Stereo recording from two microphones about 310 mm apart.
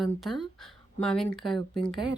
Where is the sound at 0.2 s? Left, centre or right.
Centre.